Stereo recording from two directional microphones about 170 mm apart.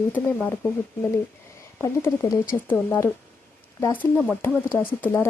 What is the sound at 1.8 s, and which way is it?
Speech, 15° left (ahead or behind).